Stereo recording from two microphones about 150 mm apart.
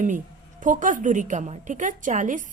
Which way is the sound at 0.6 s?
60° right (ahead or behind).